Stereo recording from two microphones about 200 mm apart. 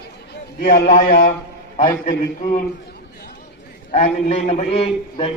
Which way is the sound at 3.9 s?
35° left (ahead or behind).